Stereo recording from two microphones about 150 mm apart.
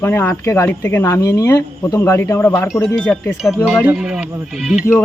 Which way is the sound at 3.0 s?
5° left (ahead or behind).